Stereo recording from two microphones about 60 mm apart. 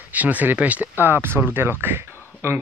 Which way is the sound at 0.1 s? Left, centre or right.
Right.